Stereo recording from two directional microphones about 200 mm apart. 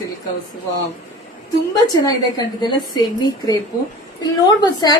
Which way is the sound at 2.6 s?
20° left (ahead or behind).